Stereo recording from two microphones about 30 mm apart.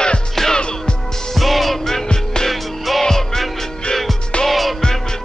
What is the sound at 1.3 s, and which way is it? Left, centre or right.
Music, centre.